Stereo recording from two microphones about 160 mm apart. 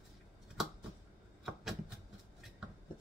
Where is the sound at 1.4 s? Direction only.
Centre (ahead or behind).